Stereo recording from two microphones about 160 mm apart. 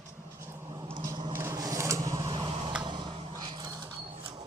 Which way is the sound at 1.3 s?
15° right (ahead or behind).